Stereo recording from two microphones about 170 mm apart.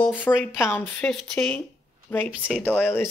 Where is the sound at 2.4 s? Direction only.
10° right (ahead or behind).